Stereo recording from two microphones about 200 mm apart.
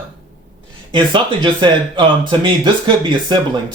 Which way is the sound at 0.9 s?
25° right (ahead or behind).